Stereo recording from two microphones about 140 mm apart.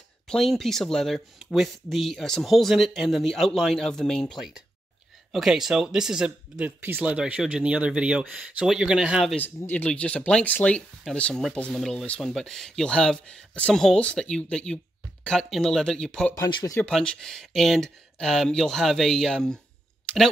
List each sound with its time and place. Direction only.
0.3 s speech: centre (ahead or behind)
9.3 s speech: 10° left (ahead or behind)
16.4 s speech: 35° left (ahead or behind)
16.7 s speech: 10° left (ahead or behind)